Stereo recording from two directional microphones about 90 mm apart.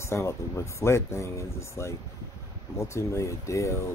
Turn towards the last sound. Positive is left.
turn(degrees=35)  # may be behind; listen again after turning